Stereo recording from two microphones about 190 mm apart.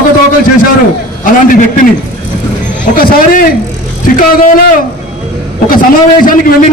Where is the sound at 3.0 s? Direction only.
50° left (ahead or behind).